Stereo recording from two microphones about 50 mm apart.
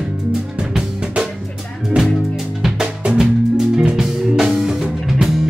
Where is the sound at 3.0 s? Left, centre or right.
Centre.